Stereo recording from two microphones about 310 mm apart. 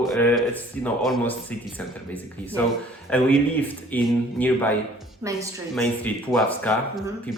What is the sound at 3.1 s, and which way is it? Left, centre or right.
Speech, centre.